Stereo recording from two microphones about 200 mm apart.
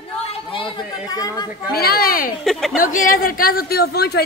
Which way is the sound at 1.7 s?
50° left (ahead or behind).